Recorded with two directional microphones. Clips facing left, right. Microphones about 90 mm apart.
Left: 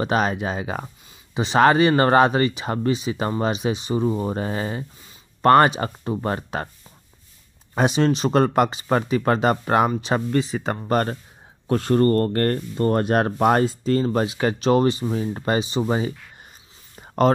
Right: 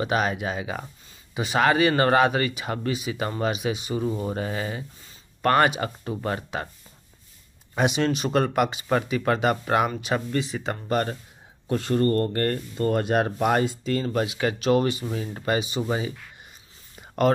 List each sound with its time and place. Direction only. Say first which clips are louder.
0.0 s speech: left 3 dB; 35° left (ahead or behind)
7.7 s speech: left 4 dB; 35° left (ahead or behind)
17.0 s a sound: left 4 dB; 35° left (ahead or behind)